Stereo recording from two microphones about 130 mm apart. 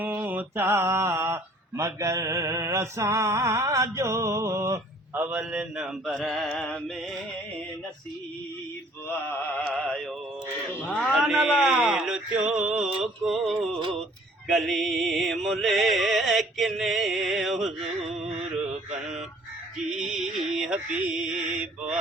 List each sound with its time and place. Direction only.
0.0 s mantra: 15° right (ahead or behind); by 6.9 s 5° left (ahead or behind)
9.6 s music: 5° left (ahead or behind)
19.9 s music: 5° right (ahead or behind)
20.4 s mantra: 5° right (ahead or behind)